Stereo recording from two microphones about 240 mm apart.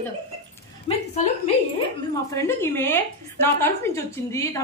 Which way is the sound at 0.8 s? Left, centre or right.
Left.